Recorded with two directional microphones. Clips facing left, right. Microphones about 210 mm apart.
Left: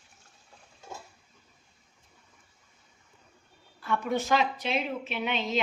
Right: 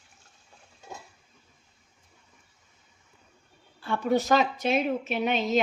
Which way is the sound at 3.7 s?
30° right (ahead or behind).